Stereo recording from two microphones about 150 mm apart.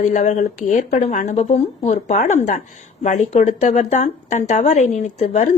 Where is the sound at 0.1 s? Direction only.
55° left (ahead or behind).